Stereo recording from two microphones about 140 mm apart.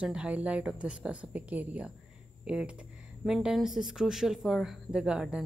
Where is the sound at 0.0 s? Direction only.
5° right (ahead or behind).